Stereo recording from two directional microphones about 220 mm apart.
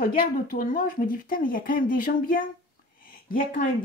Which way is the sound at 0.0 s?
40° left (ahead or behind).